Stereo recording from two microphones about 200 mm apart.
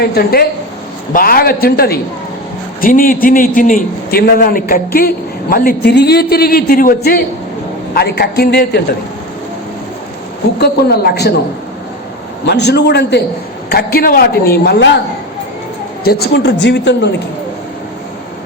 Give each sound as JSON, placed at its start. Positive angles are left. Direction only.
{"t": 0.0, "sound": "a man's voice", "side_deg": 50}
{"t": 10.6, "sound": "a man's voice", "side_deg": 55}
{"t": 12.5, "sound": "a man's voice", "side_deg": 55}
{"t": 16.0, "sound": "a man's voice", "side_deg": 50}